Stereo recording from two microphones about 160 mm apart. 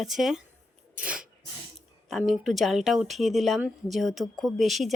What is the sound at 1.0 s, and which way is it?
Sneeze, 5° right (ahead or behind).